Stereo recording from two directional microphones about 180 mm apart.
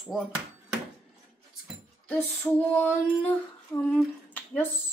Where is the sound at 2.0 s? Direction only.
10° left (ahead or behind).